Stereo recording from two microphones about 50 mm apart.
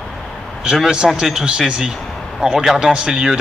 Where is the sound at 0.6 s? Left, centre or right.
Centre.